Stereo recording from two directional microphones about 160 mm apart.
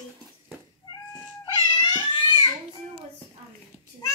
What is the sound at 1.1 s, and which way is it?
Cat, 25° left (ahead or behind).